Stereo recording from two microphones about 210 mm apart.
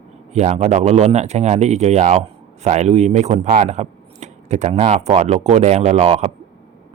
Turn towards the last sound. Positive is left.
turn(degrees=-30)  # may be behind; listen again after turning